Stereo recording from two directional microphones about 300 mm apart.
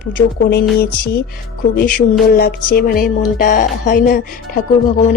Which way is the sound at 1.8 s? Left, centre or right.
Left.